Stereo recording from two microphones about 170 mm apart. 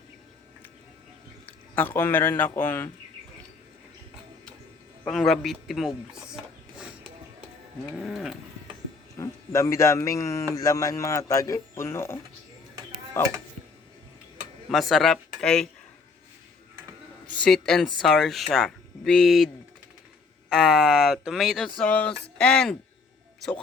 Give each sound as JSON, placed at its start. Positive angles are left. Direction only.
{"t": 1.7, "sound": "speech", "side_deg": 10}
{"t": 5.0, "sound": "speech", "side_deg": 0}
{"t": 7.9, "sound": "speech", "side_deg": 0}
{"t": 9.1, "sound": "speech", "side_deg": 15}
{"t": 14.7, "sound": "speech", "side_deg": 0}
{"t": 17.3, "sound": "speech", "side_deg": 5}
{"t": 20.5, "sound": "speech", "side_deg": 0}